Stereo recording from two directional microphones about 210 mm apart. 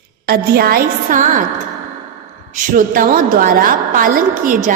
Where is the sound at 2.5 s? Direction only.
40° right (ahead or behind).